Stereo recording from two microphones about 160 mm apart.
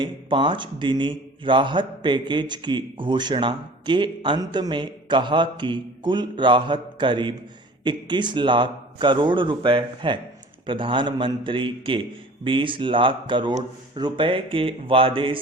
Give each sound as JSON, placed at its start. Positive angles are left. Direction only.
{"t": 0.0, "sound": "a man's voice", "side_deg": -30}